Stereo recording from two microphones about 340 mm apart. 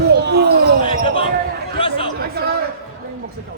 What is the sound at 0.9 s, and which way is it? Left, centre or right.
Basketball bounce, centre.